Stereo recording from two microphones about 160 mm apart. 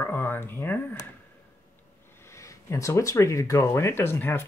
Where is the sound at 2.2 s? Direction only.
20° left (ahead or behind).